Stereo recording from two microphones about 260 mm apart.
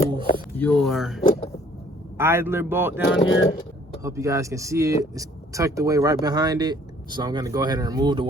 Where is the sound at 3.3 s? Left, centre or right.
Left.